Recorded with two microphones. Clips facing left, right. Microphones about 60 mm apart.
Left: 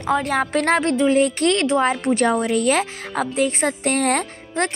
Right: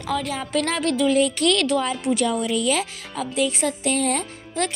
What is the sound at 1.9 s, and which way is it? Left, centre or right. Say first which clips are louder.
A woman's voice: left 4 dB; left.